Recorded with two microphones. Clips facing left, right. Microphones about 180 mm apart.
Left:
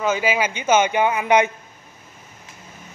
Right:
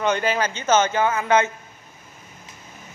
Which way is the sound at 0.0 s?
5° left (ahead or behind).